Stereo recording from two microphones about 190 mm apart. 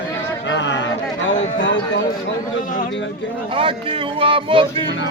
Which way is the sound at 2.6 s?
45° left (ahead or behind).